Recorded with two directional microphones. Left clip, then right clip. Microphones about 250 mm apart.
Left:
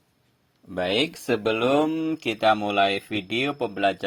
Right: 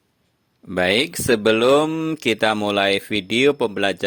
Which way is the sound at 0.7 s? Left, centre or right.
Right.